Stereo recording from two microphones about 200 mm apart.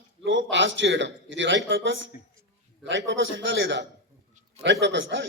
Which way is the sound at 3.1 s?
70° right (ahead or behind).